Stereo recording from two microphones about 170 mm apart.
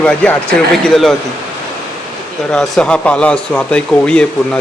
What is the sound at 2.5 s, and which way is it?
Speech, 5° left (ahead or behind).